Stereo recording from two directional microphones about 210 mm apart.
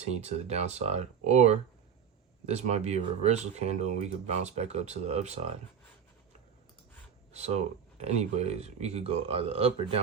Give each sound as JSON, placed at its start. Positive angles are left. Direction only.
{"t": 0.2, "sound": "speech", "side_deg": -30}
{"t": 7.3, "sound": "speech", "side_deg": -30}